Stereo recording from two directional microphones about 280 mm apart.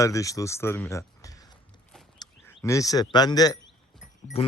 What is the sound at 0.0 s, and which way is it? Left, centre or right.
Speech, centre.